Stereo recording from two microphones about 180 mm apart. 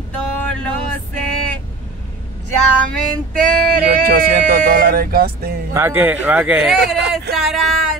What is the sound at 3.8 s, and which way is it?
Speech, 55° right (ahead or behind).